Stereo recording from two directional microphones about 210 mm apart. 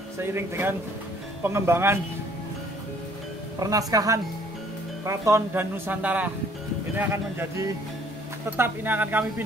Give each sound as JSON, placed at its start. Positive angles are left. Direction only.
{"t": 0.2, "sound": "speech", "side_deg": -10}
{"t": 3.5, "sound": "speech", "side_deg": -15}